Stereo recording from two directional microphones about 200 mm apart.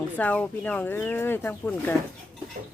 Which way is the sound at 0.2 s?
10° left (ahead or behind).